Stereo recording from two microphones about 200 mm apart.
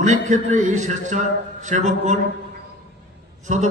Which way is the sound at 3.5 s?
35° right (ahead or behind).